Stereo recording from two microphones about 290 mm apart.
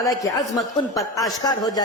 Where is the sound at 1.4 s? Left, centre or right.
Centre.